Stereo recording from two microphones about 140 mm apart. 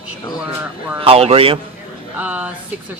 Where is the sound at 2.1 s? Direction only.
10° right (ahead or behind).